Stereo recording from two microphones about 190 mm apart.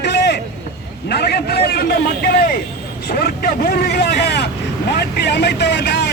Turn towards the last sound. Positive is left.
turn(degrees=65)  # may be behind; listen again after turning